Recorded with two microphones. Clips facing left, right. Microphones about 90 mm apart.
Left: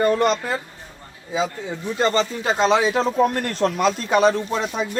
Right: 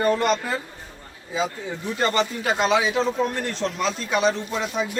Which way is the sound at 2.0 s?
25° left (ahead or behind).